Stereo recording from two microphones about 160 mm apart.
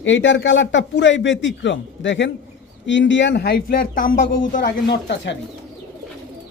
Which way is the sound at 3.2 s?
90° left.